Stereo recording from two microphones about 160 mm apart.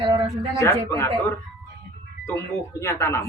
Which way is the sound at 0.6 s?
15° left (ahead or behind).